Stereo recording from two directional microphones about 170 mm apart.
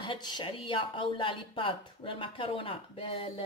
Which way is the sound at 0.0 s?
25° left (ahead or behind).